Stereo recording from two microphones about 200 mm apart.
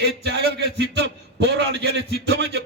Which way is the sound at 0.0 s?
60° right (ahead or behind).